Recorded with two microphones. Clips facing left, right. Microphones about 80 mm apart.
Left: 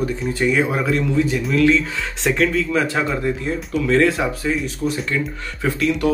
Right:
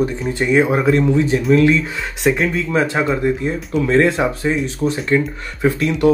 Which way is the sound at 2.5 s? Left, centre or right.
Right.